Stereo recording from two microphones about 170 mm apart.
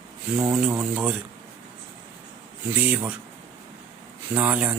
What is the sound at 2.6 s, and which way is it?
Speech, 10° right (ahead or behind).